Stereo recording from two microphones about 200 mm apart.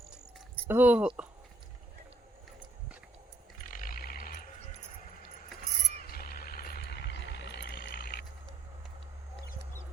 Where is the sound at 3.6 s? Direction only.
45° left (ahead or behind).